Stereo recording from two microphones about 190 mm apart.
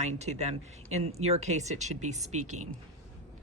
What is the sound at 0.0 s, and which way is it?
Speech, 35° right (ahead or behind).